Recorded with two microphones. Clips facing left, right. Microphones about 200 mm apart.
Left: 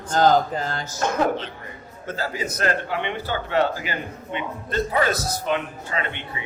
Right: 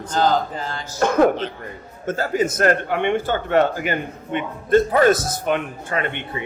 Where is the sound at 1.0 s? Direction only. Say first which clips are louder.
Right 6 dB; 55° right (ahead or behind).